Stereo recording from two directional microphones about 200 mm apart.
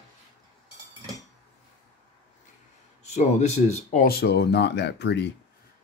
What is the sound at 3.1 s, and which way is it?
Speech, 35° left (ahead or behind).